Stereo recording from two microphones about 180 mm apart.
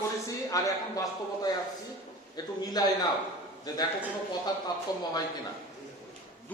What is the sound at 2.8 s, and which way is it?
Speech, 20° left (ahead or behind).